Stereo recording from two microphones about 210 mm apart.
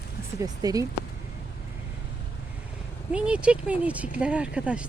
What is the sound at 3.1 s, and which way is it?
Speech, 5° right (ahead or behind).